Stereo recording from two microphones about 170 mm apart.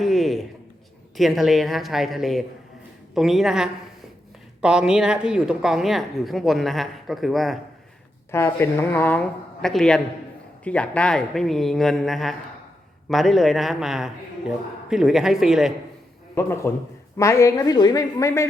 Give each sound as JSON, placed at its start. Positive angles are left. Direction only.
{"t": 0.0, "sound": "a sound", "side_deg": 0}
{"t": 1.1, "sound": "speech", "side_deg": 0}
{"t": 8.3, "sound": "speech", "side_deg": 15}
{"t": 16.3, "sound": "speech", "side_deg": 15}